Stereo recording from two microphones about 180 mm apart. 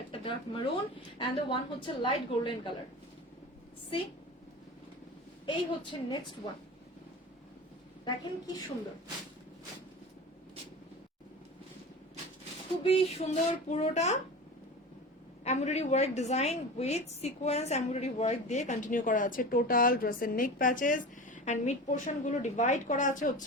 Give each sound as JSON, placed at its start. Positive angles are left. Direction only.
{"t": 0.1, "sound": "a sound", "side_deg": 30}
{"t": 1.2, "sound": "a woman's voice", "side_deg": 25}
{"t": 5.5, "sound": "a woman's voice", "side_deg": 25}
{"t": 8.0, "sound": "a woman's voice", "side_deg": 20}
{"t": 12.8, "sound": "speech", "side_deg": 35}
{"t": 15.4, "sound": "a woman's voice", "side_deg": 40}